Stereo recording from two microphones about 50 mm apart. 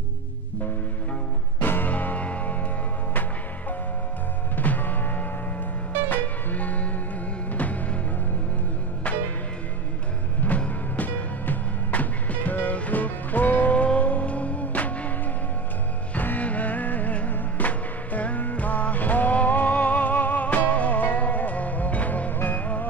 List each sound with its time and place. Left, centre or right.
1.6 s music: left
4.6 s music: left
10.4 s music: left
16.2 s music: left